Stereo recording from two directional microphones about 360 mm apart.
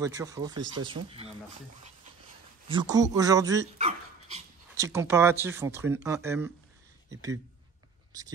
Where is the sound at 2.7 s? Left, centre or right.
Centre.